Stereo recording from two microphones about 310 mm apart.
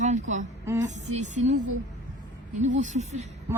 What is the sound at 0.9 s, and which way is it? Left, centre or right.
Speech, right.